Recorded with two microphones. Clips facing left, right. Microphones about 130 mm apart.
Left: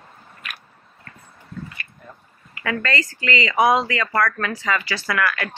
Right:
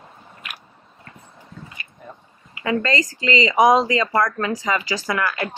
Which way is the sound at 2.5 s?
20° right (ahead or behind).